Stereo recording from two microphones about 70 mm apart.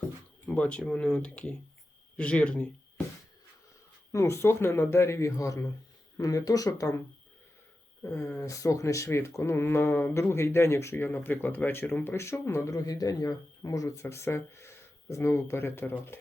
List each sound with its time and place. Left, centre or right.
0.4 s speech: centre
4.1 s speech: left
8.0 s speech: left
12.7 s speech: left